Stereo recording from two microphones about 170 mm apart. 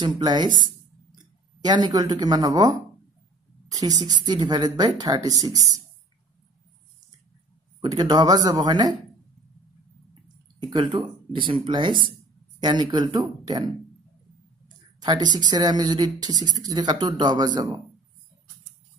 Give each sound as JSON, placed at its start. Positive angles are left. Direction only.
{"t": 0.0, "sound": "speech", "side_deg": -25}
{"t": 7.8, "sound": "speech", "side_deg": -25}
{"t": 10.6, "sound": "speech", "side_deg": -25}
{"t": 15.0, "sound": "speech", "side_deg": -25}